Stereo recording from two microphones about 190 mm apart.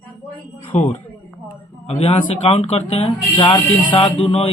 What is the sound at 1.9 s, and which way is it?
Speech, 30° left (ahead or behind).